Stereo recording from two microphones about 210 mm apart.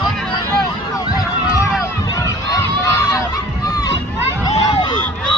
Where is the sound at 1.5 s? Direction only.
15° left (ahead or behind).